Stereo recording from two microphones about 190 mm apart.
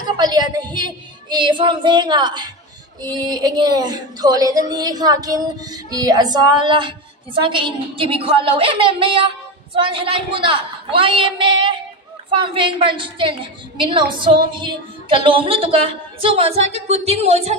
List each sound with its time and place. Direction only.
0.2 s a woman's voice: 20° right (ahead or behind)